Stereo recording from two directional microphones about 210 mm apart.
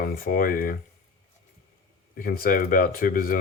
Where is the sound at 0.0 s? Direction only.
45° left (ahead or behind).